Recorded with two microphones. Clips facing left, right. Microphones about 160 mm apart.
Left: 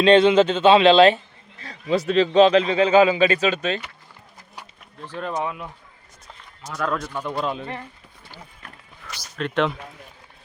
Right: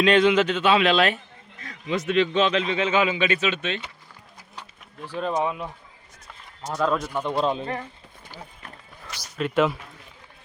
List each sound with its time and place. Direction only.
0.0 s a man's voice: 30° left (ahead or behind)
4.9 s speech: 10° right (ahead or behind)
6.7 s a man's voice: 20° right (ahead or behind)
9.4 s speech: 5° right (ahead or behind)